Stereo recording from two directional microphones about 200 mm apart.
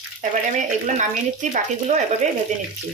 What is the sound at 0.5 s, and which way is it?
A woman's voice, 40° right (ahead or behind).